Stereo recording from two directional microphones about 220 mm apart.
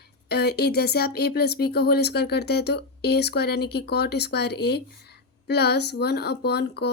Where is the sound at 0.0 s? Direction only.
45° left (ahead or behind).